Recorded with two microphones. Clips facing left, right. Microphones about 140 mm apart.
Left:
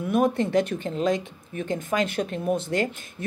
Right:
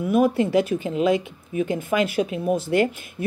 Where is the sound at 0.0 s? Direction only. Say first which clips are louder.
Right 3 dB; 5° right (ahead or behind).